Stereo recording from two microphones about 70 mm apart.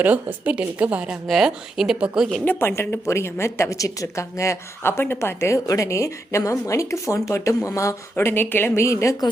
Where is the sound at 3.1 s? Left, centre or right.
Left.